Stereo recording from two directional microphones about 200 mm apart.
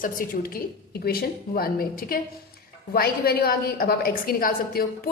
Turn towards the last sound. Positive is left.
turn(degrees=45)  # may be behind; listen again after turning